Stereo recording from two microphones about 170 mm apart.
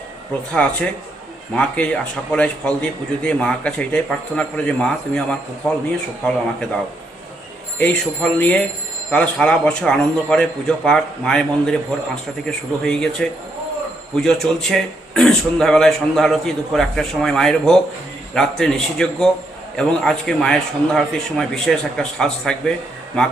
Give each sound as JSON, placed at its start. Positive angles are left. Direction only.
{"t": 0.5, "sound": "speech", "side_deg": 5}
{"t": 7.8, "sound": "speech", "side_deg": 5}